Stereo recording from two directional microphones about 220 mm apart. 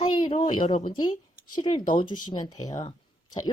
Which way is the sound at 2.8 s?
20° left (ahead or behind).